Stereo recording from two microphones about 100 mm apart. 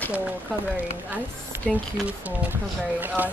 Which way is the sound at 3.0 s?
20° right (ahead or behind).